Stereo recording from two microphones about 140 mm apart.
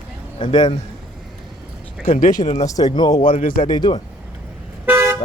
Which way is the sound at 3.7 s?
30° left (ahead or behind).